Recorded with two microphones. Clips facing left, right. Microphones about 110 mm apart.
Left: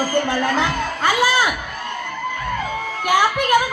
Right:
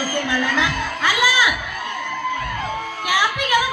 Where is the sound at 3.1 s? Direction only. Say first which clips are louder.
Left 4 dB; 45° left (ahead or behind).